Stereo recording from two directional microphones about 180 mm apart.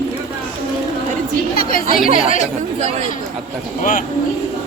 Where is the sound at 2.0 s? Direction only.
35° right (ahead or behind).